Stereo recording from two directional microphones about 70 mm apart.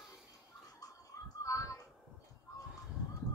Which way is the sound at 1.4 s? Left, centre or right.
Left.